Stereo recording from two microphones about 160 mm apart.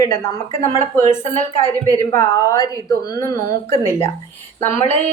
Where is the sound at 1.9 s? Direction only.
20° left (ahead or behind).